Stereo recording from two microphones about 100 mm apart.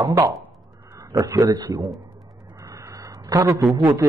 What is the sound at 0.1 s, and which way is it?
A man's voice, 30° right (ahead or behind).